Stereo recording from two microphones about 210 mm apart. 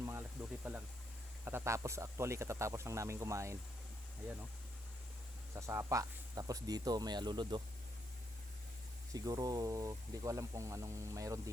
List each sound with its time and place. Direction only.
0.0 s a sound: 10° right (ahead or behind)
1.5 s speech: 10° right (ahead or behind)
5.5 s speech: 15° right (ahead or behind)
9.1 s speech: 20° right (ahead or behind)